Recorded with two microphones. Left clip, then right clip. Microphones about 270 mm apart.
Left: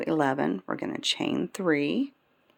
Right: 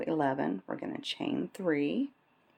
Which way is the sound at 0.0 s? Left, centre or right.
Left.